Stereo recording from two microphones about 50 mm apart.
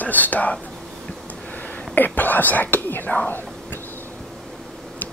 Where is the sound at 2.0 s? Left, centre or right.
Left.